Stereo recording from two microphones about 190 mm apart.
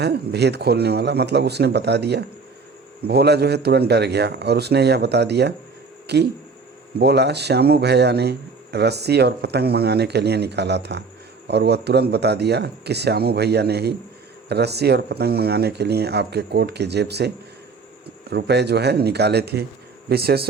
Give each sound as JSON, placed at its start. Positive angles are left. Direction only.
{"t": 0.0, "sound": "a man's voice", "side_deg": -60}